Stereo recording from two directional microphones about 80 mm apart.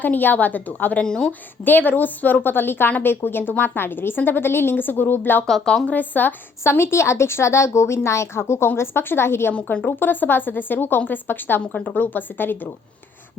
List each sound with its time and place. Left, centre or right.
0.0 s a woman's voice: left
1.0 s speech: centre
1.3 s a woman's voice: left
5.5 s speech: centre
5.9 s a woman's voice: left
6.7 s speech: left
9.5 s a woman's voice: centre